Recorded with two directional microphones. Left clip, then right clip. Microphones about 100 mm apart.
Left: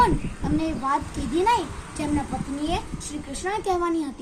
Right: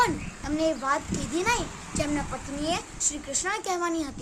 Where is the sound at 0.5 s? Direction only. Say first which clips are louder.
Left 1 dB; 35° right (ahead or behind).